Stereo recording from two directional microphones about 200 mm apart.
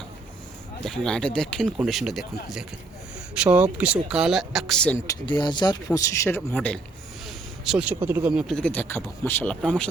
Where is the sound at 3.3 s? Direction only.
5° right (ahead or behind).